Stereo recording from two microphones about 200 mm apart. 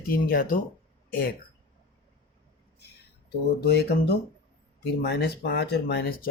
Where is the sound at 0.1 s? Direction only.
45° left (ahead or behind).